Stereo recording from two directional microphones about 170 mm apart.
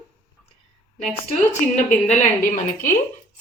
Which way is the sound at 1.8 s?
45° left (ahead or behind).